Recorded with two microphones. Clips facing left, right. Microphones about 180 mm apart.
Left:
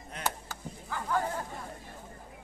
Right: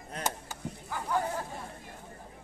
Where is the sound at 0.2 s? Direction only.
15° right (ahead or behind).